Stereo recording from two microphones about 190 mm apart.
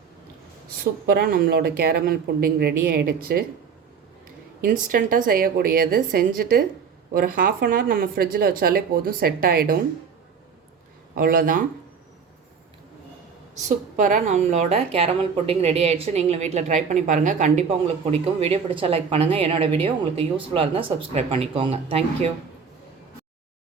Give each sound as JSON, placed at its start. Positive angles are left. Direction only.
{"t": 1.0, "sound": "speech", "side_deg": -55}
{"t": 4.6, "sound": "speech", "side_deg": -45}
{"t": 11.1, "sound": "speech", "side_deg": -50}
{"t": 13.7, "sound": "speech", "side_deg": -40}